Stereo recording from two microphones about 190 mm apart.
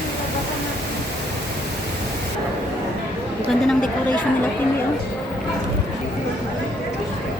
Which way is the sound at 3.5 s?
Centre (ahead or behind).